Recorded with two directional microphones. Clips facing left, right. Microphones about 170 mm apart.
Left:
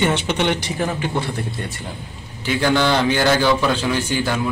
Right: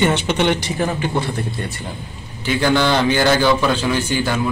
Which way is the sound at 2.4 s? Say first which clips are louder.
Right 1 dB; centre (ahead or behind).